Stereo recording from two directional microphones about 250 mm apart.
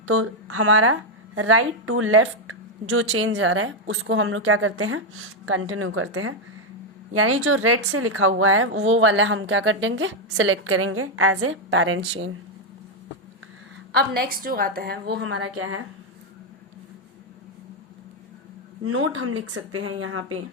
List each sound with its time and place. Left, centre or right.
0.0 s a woman's voice: right
14.2 s a woman's voice: right
18.8 s a woman's voice: right